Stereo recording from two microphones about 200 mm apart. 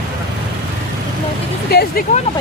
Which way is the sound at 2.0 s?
45° left (ahead or behind).